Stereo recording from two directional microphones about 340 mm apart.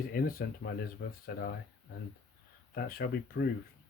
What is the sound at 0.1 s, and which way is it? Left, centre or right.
Speech, left.